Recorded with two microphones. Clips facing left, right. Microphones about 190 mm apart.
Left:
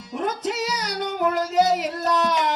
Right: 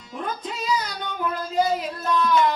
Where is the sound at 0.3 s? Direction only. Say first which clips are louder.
Even; 85° left.